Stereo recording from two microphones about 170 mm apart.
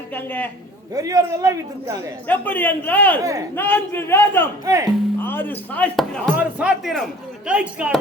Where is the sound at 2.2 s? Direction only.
10° left (ahead or behind).